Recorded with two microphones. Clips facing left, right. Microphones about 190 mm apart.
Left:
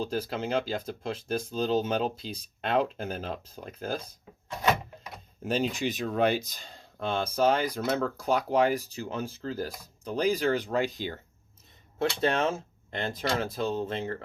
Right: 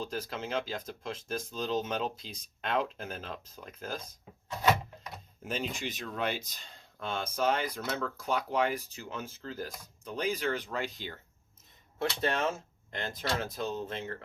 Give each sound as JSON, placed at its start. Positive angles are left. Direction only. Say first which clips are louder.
{"t": 0.0, "sound": "speech", "louder": "left 6 dB", "side_deg": 30}
{"t": 5.5, "sound": "speech", "louder": "left 7 dB", "side_deg": 35}
{"t": 12.2, "sound": "speech", "louder": "left 4 dB", "side_deg": 30}